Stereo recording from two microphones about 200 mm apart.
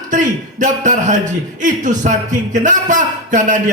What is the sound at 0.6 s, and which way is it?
A man's voice, 40° right (ahead or behind).